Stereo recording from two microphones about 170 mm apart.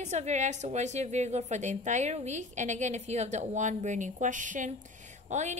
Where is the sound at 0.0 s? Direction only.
40° right (ahead or behind).